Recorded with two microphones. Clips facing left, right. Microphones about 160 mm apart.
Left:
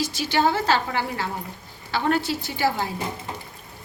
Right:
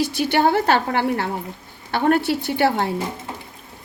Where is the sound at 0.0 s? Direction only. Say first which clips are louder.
Right 4 dB; 60° right (ahead or behind).